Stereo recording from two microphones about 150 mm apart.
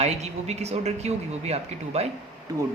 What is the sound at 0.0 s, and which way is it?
A woman's voice, 45° right (ahead or behind).